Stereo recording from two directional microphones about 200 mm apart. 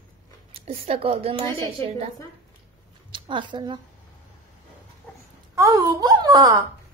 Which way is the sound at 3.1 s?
25° right (ahead or behind).